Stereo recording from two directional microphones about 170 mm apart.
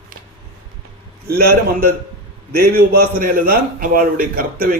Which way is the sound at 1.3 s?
65° right (ahead or behind).